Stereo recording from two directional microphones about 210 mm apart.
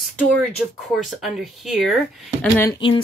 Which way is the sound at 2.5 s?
20° left (ahead or behind).